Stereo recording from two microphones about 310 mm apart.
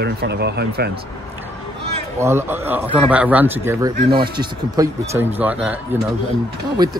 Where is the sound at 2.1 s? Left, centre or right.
Centre.